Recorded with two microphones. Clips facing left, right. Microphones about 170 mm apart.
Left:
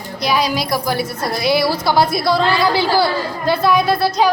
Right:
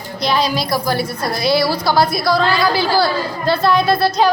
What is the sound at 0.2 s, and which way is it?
A woman's voice, 10° left (ahead or behind).